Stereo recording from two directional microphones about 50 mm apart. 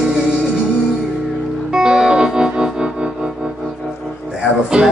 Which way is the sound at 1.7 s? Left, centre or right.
Centre.